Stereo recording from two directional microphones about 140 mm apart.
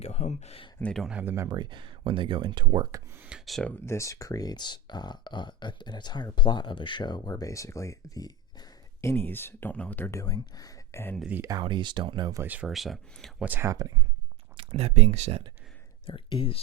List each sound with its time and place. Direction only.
0.0 s speech: 55° left (ahead or behind)
0.8 s speech: 5° left (ahead or behind)
1.1 s speech: 15° right (ahead or behind)
1.5 s speech: 30° right (ahead or behind)
3.2 s speech: 5° right (ahead or behind)
3.8 s speech: 20° left (ahead or behind)
11.2 s speech: 10° right (ahead or behind)
11.4 s speech: 30° right (ahead or behind)
12.4 s speech: 10° right (ahead or behind)
13.4 s speech: 15° right (ahead or behind)
14.5 s speech: 45° right (ahead or behind)
16.0 s speech: 40° left (ahead or behind)